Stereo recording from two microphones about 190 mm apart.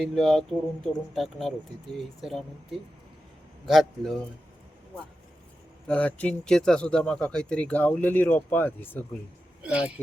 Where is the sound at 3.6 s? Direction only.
Centre (ahead or behind).